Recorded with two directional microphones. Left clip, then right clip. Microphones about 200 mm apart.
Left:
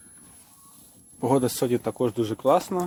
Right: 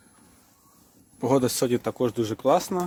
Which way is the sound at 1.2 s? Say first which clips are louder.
Even; 5° left (ahead or behind).